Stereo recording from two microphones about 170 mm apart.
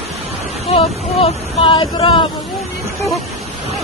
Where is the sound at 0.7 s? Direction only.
35° left (ahead or behind).